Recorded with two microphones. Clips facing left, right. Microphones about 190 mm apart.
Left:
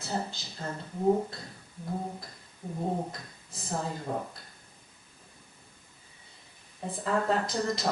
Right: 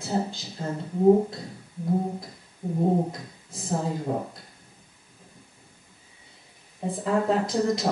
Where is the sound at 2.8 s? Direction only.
25° right (ahead or behind).